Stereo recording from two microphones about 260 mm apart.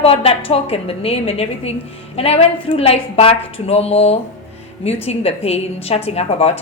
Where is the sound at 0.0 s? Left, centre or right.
Left.